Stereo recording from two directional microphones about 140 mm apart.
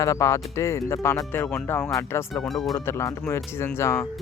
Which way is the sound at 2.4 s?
Centre (ahead or behind).